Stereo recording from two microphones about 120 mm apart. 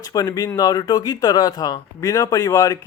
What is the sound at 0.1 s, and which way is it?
Speech, 35° left (ahead or behind).